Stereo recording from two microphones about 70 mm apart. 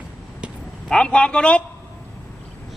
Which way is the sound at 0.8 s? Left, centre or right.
Centre.